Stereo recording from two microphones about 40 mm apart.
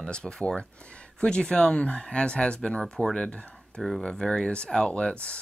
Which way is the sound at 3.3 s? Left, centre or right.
Left.